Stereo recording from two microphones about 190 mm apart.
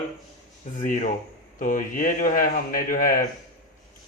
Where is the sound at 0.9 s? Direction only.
45° left (ahead or behind).